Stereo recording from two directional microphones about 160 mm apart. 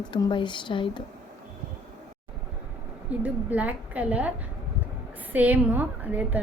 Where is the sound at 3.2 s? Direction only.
10° right (ahead or behind).